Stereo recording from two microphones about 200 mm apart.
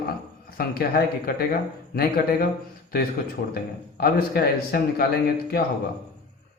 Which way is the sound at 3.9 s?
50° left (ahead or behind).